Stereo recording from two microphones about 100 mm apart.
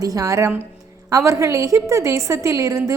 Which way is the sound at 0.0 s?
35° right (ahead or behind).